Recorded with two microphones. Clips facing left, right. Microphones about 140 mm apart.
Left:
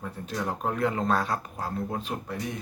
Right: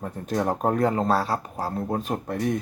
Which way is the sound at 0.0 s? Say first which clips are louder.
Right 6 dB; 45° right (ahead or behind).